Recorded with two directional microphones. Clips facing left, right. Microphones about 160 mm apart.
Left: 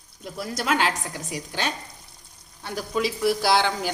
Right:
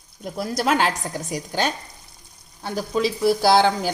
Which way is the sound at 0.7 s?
40° right (ahead or behind).